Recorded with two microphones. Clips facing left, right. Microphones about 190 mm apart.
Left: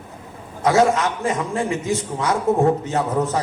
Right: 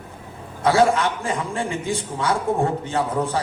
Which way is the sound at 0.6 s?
30° right (ahead or behind).